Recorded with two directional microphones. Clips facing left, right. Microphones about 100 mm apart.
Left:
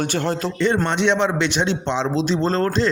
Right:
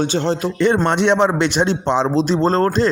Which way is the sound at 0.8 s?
45° right (ahead or behind).